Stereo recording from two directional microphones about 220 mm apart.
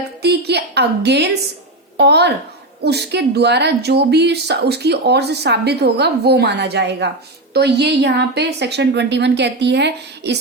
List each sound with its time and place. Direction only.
0.2 s a woman's voice: 50° right (ahead or behind)